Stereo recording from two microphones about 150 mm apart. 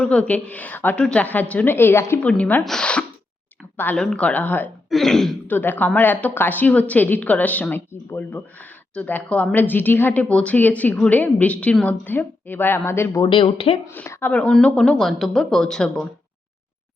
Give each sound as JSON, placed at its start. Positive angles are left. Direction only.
{"t": 0.0, "sound": "speech", "side_deg": 5}
{"t": 13.2, "sound": "speech", "side_deg": 40}
{"t": 13.8, "sound": "a woman's voice", "side_deg": 15}